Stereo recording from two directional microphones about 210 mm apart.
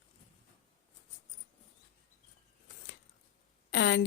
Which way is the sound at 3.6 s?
55° left (ahead or behind).